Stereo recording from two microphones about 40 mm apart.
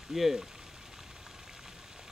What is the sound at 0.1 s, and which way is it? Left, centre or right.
Speech, centre.